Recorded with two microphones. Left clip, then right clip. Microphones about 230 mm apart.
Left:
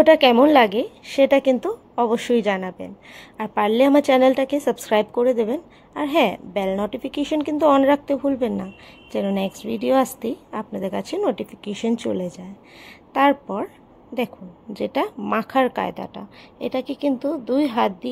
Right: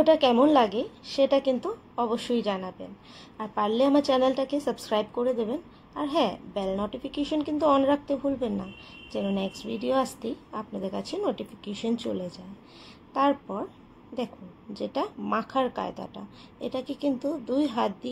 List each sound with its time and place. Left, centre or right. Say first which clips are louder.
0.0 s a woman's voice: left 7 dB; left